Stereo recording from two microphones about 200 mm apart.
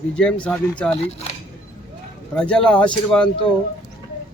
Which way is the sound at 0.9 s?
30° left (ahead or behind).